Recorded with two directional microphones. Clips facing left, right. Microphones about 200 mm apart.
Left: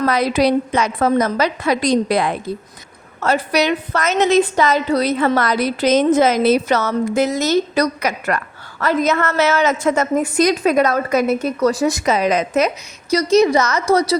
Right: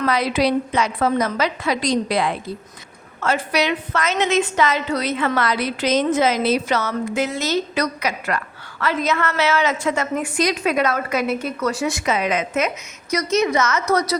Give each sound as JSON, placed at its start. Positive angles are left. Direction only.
{"t": 0.0, "sound": "a woman's voice", "side_deg": 40}